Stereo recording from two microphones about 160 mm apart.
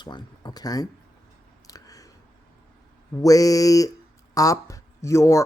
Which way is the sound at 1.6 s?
20° left (ahead or behind).